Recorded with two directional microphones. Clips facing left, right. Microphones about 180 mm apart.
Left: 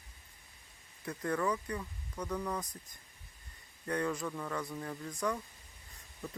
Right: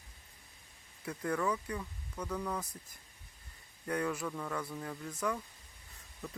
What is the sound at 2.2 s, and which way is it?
Speech, 10° left (ahead or behind).